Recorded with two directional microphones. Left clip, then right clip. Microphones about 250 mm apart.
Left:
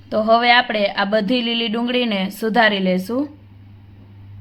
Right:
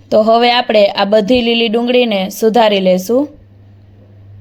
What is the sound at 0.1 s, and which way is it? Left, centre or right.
A woman's voice, centre.